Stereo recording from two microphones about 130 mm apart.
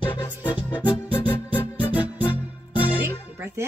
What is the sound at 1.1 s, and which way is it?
Music, 15° left (ahead or behind).